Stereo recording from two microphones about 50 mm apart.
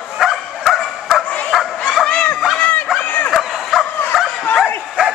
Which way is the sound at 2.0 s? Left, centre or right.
Left.